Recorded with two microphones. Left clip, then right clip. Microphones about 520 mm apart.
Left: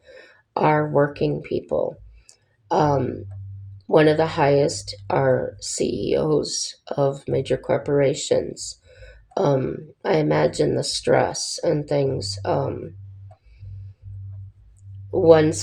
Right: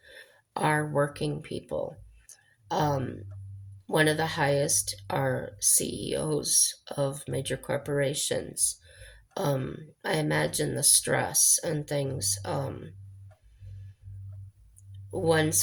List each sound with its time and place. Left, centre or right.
0.0 s speech: right
15.1 s speech: right